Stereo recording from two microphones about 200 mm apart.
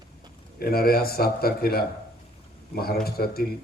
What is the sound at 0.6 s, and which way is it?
Speech, 50° left (ahead or behind).